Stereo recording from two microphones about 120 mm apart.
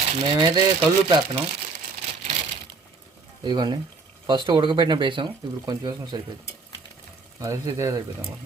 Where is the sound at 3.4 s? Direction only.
35° right (ahead or behind).